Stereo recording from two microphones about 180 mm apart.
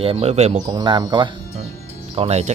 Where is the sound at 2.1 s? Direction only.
35° right (ahead or behind).